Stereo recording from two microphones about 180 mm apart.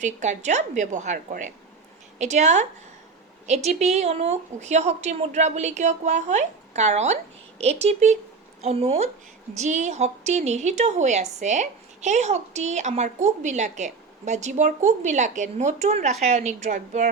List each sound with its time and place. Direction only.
0.0 s a woman's voice: 40° right (ahead or behind)